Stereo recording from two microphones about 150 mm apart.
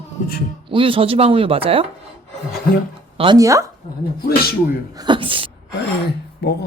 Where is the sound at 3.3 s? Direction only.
20° right (ahead or behind).